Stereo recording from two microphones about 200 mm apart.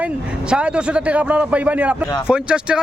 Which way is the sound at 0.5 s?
5° right (ahead or behind).